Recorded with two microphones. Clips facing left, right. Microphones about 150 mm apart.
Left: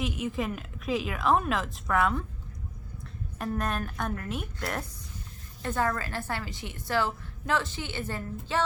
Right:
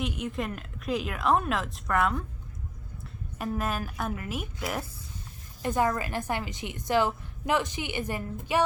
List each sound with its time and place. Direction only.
0.0 s speech: centre (ahead or behind)
3.3 s speech: 5° right (ahead or behind)
5.6 s a woman's voice: 15° right (ahead or behind)